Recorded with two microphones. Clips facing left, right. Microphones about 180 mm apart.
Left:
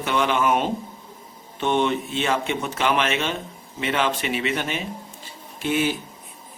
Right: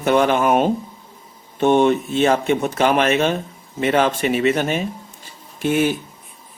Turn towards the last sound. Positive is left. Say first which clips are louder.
# right 5 dB
turn(degrees=-50)  # may be behind; listen again after turning